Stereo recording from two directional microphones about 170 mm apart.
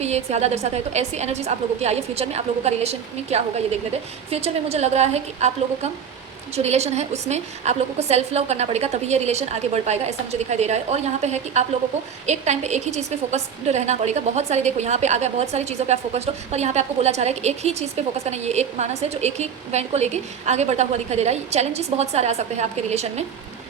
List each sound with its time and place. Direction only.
0.0 s a woman's voice: 40° right (ahead or behind)